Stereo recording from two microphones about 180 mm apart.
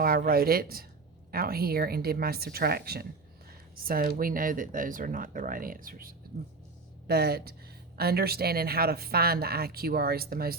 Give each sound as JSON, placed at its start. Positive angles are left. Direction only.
{"t": 0.0, "sound": "speech", "side_deg": -55}